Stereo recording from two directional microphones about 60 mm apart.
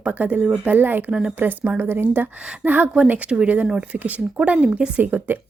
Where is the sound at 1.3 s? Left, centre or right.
Right.